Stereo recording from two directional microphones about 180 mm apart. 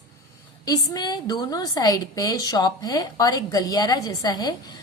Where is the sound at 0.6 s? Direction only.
20° left (ahead or behind).